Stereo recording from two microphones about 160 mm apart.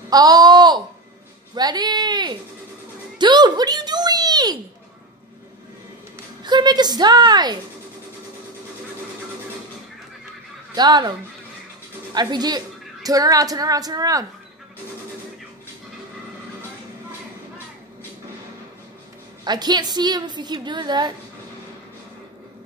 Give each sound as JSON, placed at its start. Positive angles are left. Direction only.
{"t": 0.1, "sound": "a sound", "side_deg": -25}
{"t": 1.5, "sound": "a woman's voice", "side_deg": -25}
{"t": 6.4, "sound": "a woman's voice", "side_deg": -25}
{"t": 10.7, "sound": "a woman's voice", "side_deg": -25}
{"t": 19.4, "sound": "a woman's voice", "side_deg": -25}